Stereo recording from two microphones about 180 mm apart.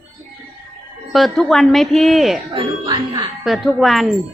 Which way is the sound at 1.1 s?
Centre (ahead or behind).